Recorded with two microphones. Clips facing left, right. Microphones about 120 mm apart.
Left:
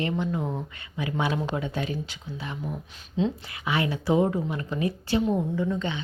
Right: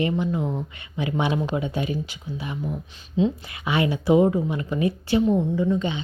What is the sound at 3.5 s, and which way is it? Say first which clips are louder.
Speech: right 4 dB; 20° right (ahead or behind).